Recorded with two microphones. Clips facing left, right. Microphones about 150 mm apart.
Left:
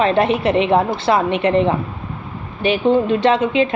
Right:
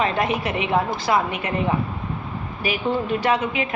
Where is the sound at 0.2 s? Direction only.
25° left (ahead or behind).